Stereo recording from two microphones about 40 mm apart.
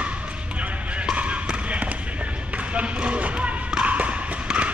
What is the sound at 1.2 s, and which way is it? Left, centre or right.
Basketball bounce, right.